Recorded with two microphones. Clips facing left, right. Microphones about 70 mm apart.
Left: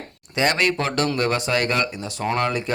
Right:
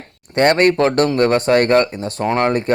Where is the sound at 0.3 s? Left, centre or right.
Right.